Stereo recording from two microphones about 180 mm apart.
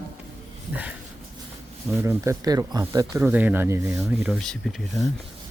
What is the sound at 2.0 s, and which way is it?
Speech, 15° right (ahead or behind).